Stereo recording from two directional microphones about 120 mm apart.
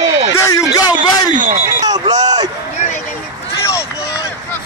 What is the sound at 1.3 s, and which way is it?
Speech, 90° right.